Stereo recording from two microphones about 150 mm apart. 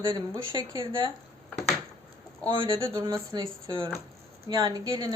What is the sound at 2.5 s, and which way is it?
Speech, 35° right (ahead or behind).